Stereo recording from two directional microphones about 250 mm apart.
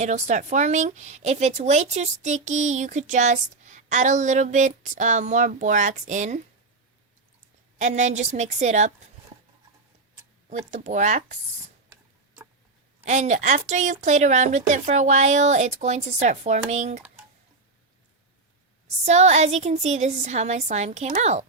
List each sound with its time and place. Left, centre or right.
0.0 s speech: right
7.8 s speech: right
10.5 s speech: right
13.1 s speech: right
19.0 s speech: right